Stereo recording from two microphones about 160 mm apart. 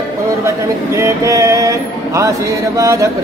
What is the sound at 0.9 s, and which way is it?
Speech, 20° right (ahead or behind).